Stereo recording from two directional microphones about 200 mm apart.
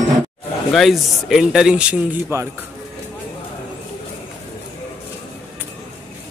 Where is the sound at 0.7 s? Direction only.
Centre (ahead or behind).